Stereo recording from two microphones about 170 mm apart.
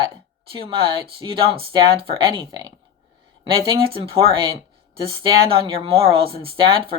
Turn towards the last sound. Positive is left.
turn(degrees=-30)  # may be behind; listen again after turning